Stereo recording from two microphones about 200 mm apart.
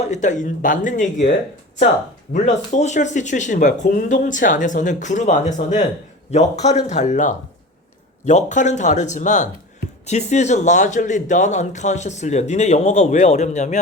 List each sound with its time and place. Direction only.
0.0 s speech: 35° left (ahead or behind)
2.3 s speech: 35° left (ahead or behind)